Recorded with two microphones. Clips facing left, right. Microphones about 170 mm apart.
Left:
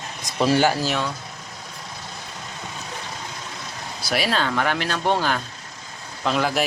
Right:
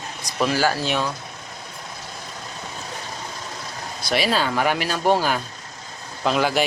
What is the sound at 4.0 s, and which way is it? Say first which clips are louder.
Speech: right 2 dB; 5° left (ahead or behind).